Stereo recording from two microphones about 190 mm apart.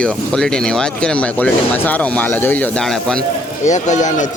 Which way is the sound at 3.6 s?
40° left (ahead or behind).